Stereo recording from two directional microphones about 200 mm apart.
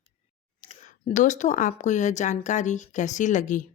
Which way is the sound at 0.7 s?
35° left (ahead or behind).